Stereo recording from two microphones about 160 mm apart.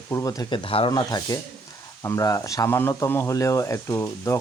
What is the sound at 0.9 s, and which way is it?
Speech, 25° left (ahead or behind).